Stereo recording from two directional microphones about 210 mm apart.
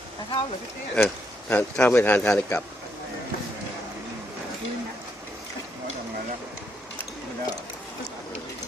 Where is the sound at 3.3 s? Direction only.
45° left (ahead or behind).